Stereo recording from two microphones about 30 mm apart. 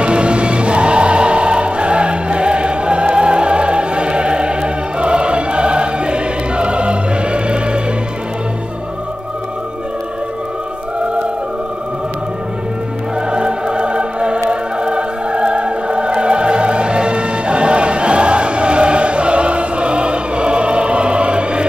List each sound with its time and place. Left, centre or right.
0.0 s music: right
13.3 s choir: right